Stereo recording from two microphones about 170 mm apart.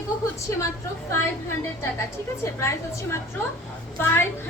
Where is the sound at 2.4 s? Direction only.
15° left (ahead or behind).